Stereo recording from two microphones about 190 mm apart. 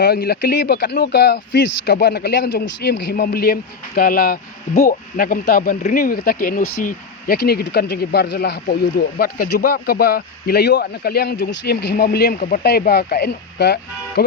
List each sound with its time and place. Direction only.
0.0 s a man's voice: 55° left (ahead or behind)